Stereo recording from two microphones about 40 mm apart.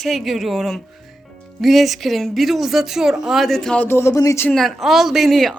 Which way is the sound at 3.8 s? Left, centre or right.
Left.